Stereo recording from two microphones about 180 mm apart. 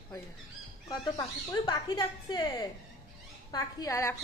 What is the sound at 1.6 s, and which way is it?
A woman's voice, 25° left (ahead or behind).